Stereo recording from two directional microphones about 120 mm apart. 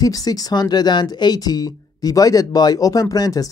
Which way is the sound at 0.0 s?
30° left (ahead or behind).